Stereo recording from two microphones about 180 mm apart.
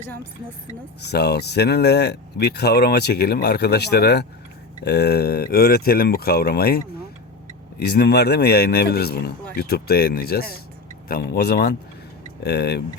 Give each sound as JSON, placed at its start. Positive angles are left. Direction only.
{"t": 1.0, "sound": "speech", "side_deg": 65}